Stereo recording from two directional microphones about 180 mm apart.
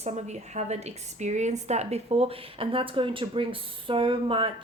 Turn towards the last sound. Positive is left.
turn(degrees=-30)  # may be behind; listen again after turning